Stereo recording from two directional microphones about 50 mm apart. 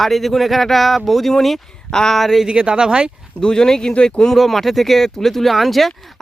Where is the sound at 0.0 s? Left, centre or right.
Centre.